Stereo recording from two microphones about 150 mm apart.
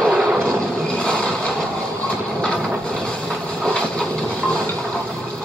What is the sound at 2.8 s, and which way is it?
Train, 5° left (ahead or behind).